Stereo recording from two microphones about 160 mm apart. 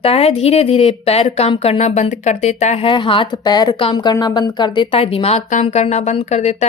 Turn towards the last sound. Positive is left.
turn(degrees=45)  # may be behind; listen again after turning